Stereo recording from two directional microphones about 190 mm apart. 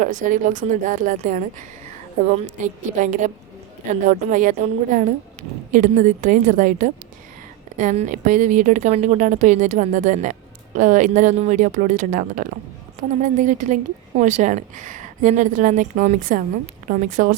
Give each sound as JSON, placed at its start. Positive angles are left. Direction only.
{"t": 0.0, "sound": "a woman's voice", "side_deg": -40}